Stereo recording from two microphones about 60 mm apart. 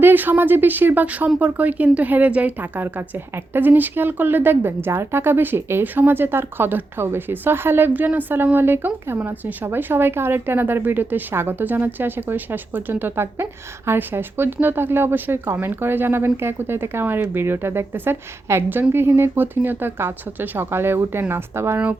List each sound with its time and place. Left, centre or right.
0.0 s a woman's voice: right